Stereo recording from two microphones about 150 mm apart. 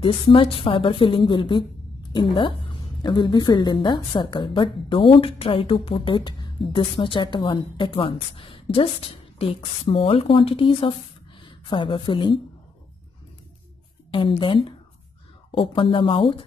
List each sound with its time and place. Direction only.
0.0 s a woman's voice: 35° left (ahead or behind)
3.0 s a woman's voice: 30° left (ahead or behind)
14.4 s a woman's voice: 35° left (ahead or behind)